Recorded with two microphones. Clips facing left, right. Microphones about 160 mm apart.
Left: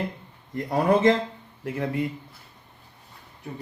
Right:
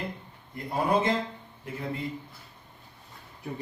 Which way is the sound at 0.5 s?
85° left.